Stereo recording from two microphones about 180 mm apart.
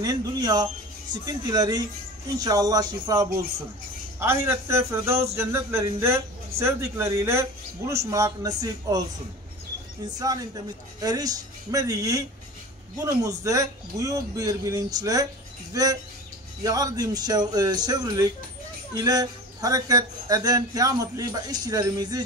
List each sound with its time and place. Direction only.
0.0 s speech: 20° right (ahead or behind)
10.0 s speech: 20° right (ahead or behind)